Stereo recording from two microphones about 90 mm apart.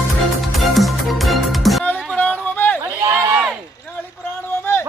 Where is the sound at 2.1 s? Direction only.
15° left (ahead or behind).